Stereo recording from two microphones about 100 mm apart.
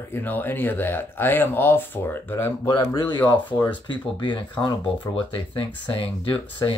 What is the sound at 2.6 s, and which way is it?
Speech, 50° left (ahead or behind).